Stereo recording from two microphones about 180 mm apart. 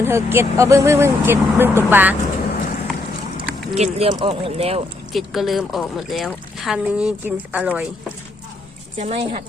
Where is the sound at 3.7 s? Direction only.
35° right (ahead or behind).